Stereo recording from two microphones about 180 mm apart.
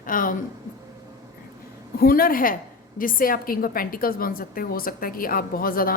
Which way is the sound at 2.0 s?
55° left (ahead or behind).